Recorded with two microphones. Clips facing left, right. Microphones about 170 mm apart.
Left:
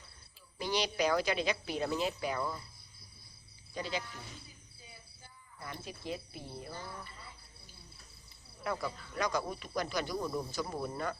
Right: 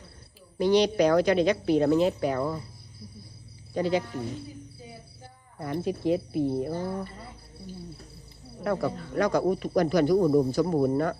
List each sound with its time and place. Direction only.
0.7 s a woman's voice: 5° left (ahead or behind)
1.6 s speech: 55° right (ahead or behind)
3.8 s speech: 55° right (ahead or behind)
4.0 s speech: 45° right (ahead or behind)
5.5 s speech: 55° right (ahead or behind)
8.5 s speech: 55° right (ahead or behind)